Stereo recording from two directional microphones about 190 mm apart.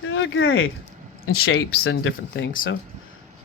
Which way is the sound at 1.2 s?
55° left (ahead or behind).